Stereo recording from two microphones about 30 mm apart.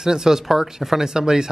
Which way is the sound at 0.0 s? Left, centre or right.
Right.